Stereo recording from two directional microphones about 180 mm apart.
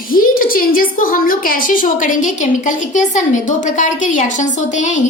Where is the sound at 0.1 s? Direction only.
50° left (ahead or behind).